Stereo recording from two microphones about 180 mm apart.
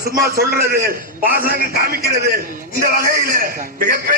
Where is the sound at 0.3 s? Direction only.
60° right (ahead or behind).